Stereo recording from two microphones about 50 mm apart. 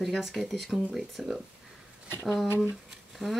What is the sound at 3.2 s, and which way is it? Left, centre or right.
Speech, centre.